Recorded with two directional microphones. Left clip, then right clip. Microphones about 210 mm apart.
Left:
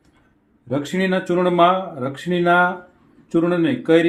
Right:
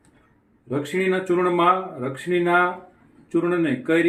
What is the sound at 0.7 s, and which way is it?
Speech, 50° left (ahead or behind).